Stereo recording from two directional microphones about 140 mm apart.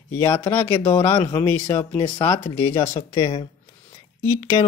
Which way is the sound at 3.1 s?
40° left (ahead or behind).